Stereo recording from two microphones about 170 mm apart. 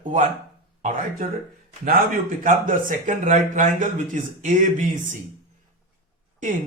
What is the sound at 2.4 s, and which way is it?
Speech, 50° right (ahead or behind).